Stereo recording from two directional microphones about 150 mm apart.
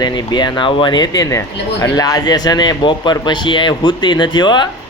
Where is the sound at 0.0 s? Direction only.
30° left (ahead or behind).